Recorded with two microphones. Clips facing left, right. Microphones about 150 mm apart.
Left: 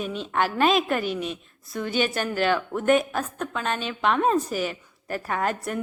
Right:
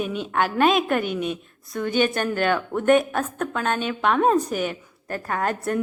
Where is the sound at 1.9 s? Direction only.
50° right (ahead or behind).